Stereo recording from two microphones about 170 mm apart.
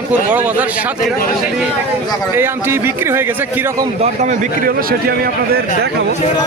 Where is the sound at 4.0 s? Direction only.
45° right (ahead or behind); by 5.6 s 60° right (ahead or behind).